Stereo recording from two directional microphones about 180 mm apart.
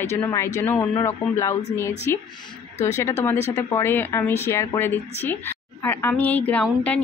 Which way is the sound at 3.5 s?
15° left (ahead or behind).